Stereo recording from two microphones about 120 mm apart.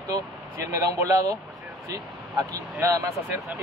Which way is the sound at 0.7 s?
25° right (ahead or behind).